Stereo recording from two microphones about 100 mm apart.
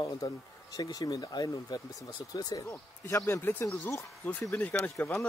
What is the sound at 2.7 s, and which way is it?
Speech, 25° left (ahead or behind).